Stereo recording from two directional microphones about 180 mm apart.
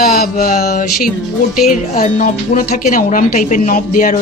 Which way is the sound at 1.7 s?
45° left (ahead or behind).